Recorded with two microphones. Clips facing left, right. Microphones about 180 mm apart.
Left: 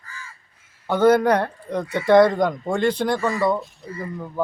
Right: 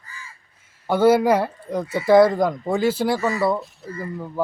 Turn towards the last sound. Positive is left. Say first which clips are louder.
# right 1 dB
turn(degrees=-5)  # may be behind; listen again after turning